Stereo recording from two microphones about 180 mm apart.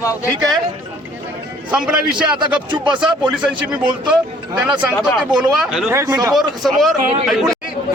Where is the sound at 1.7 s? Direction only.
5° right (ahead or behind).